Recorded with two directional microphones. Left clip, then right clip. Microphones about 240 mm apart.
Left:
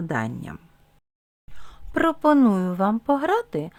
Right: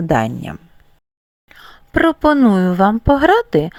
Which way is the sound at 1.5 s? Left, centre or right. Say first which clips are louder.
Right 8 dB; centre.